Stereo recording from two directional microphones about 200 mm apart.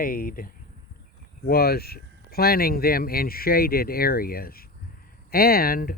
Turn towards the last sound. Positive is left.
turn(degrees=45)  # may be behind; listen again after turning